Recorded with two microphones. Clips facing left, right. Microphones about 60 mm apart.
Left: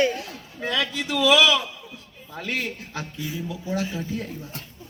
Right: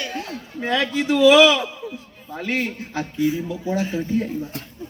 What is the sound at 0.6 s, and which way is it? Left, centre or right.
A man's voice, right.